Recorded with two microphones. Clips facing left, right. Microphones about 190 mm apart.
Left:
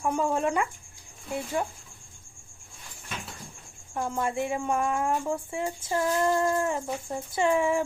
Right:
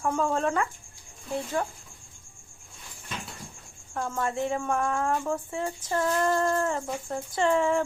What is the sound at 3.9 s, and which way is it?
Speech, 15° left (ahead or behind).